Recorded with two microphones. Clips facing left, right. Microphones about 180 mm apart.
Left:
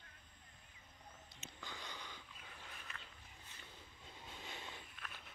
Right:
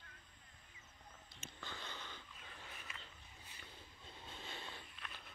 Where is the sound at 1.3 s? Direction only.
15° left (ahead or behind).